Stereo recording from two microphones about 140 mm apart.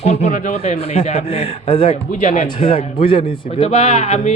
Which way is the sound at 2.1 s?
60° left (ahead or behind).